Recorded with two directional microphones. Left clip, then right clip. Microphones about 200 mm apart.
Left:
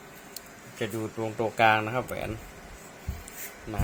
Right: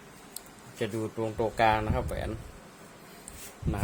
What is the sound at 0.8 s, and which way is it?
Speech, 10° right (ahead or behind).